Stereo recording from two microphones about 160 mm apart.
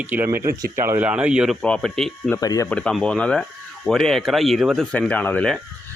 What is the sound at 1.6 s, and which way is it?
Speech, 5° left (ahead or behind).